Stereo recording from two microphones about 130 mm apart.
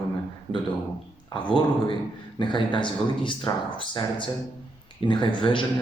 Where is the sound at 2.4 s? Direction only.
40° left (ahead or behind).